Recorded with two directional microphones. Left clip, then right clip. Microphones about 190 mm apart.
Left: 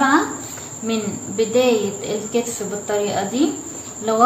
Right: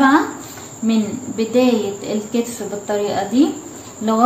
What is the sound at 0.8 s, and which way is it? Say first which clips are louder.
A woman's voice: right 3 dB; 25° right (ahead or behind).